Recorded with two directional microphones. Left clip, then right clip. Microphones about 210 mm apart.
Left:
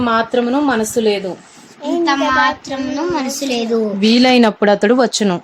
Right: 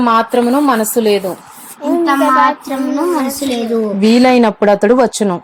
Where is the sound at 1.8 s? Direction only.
30° right (ahead or behind).